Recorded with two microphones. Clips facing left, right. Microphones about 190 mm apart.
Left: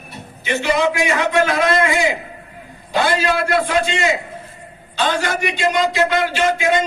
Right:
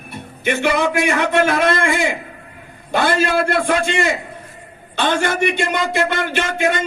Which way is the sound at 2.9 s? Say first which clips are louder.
Right 1 dB; 50° right (ahead or behind).